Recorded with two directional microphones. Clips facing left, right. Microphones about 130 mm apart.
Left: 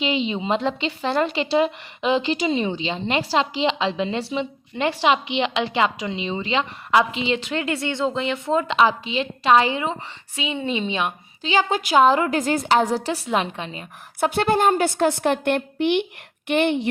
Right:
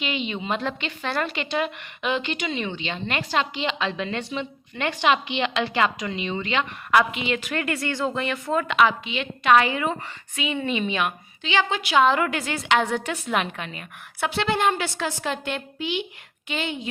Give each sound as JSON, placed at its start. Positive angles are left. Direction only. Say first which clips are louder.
{"t": 0.0, "sound": "a woman's voice", "louder": "left 5 dB", "side_deg": 30}
{"t": 14.2, "sound": "a woman's voice", "louder": "left 4 dB", "side_deg": 45}